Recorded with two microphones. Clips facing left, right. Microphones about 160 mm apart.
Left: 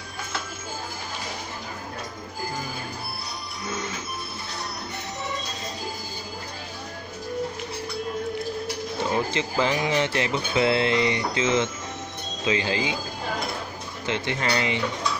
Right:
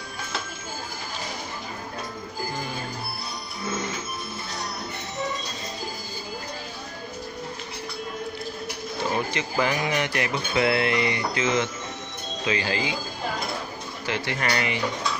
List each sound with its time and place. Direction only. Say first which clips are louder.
9.1 s speech: left 2 dB; 25° left (ahead or behind)
14.0 s speech: left 1 dB; 20° left (ahead or behind)